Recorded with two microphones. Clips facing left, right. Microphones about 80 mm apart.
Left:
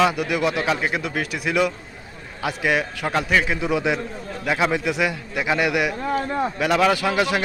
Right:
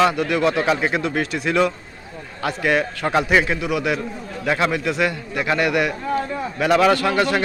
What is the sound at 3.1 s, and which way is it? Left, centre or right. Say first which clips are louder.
Speech: right 3 dB; centre.